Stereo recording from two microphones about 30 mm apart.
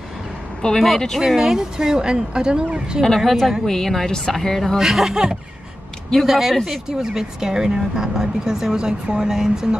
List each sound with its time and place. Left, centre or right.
0.6 s speech: left
1.2 s a woman's voice: centre
3.2 s a woman's voice: centre
3.6 s a woman's voice: centre
4.7 s a woman's voice: centre